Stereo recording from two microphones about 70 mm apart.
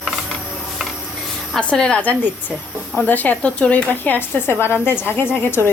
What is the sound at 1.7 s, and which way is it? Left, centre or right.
Speech, centre.